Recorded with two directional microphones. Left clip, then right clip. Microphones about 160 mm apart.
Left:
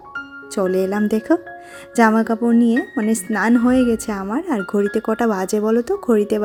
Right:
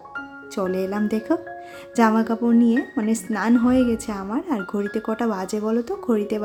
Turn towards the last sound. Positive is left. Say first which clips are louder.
# left 6 dB
turn(degrees=40)  # may be behind; listen again after turning